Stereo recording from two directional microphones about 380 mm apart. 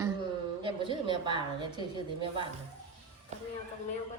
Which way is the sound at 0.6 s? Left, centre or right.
Centre.